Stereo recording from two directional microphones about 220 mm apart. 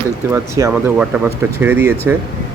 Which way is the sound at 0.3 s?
10° right (ahead or behind).